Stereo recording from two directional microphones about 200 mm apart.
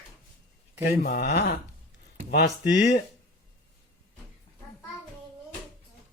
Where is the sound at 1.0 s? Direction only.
55° left (ahead or behind).